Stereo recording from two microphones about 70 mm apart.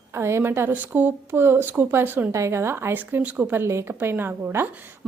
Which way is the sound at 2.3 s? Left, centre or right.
Right.